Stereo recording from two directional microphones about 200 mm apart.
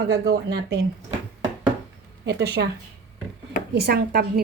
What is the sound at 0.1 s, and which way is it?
Speech, 55° right (ahead or behind).